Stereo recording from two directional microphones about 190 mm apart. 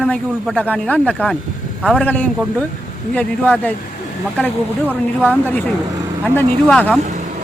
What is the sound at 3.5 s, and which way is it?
Speech, 10° left (ahead or behind).